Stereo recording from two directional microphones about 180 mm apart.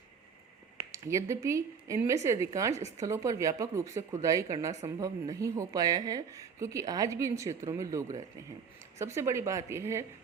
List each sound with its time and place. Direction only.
0.9 s speech: 15° right (ahead or behind)